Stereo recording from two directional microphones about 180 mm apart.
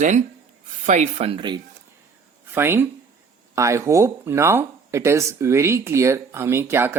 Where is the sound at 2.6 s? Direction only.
10° right (ahead or behind).